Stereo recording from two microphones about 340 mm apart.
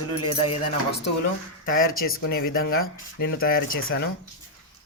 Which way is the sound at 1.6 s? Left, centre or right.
Left.